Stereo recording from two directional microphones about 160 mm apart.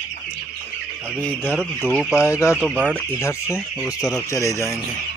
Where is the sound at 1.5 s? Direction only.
5° right (ahead or behind).